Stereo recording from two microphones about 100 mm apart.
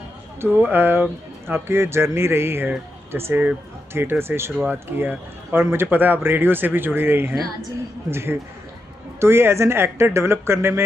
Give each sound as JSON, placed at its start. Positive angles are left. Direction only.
{"t": 0.4, "sound": "speech", "side_deg": -20}